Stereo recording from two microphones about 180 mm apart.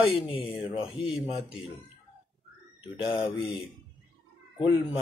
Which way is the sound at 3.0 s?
25° left (ahead or behind).